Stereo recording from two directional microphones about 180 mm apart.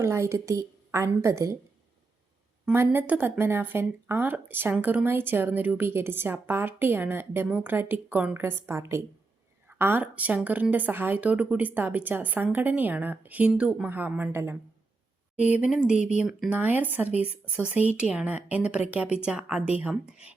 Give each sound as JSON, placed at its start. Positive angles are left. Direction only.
{"t": 0.0, "sound": "speech", "side_deg": -15}
{"t": 2.6, "sound": "speech", "side_deg": -10}